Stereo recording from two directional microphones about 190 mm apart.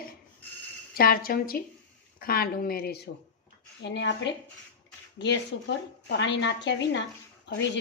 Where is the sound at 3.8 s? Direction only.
70° left (ahead or behind).